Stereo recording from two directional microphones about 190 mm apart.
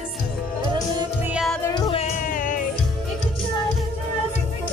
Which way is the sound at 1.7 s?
30° left (ahead or behind).